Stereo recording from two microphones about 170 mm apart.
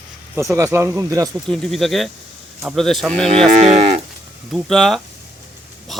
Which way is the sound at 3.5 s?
45° right (ahead or behind).